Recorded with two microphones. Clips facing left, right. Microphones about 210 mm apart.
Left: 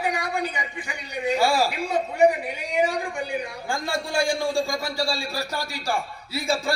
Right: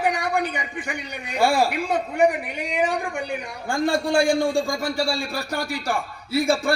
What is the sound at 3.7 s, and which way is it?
A man's voice, 60° right (ahead or behind).